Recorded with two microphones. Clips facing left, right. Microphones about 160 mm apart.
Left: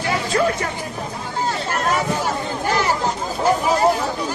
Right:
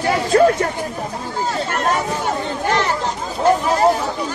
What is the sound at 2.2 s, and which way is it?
Chatter, 5° left (ahead or behind).